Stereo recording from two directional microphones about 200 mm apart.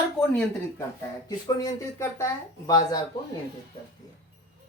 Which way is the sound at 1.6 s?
15° left (ahead or behind).